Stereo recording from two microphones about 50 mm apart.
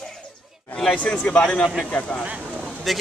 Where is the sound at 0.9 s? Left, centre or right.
Left.